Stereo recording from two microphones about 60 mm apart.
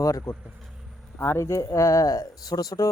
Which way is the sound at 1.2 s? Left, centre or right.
Left.